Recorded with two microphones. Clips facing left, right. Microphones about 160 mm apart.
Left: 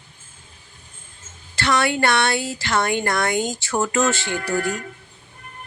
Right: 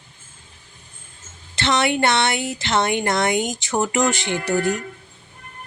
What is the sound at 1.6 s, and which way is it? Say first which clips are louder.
A woman's voice: right 1 dB; 20° right (ahead or behind).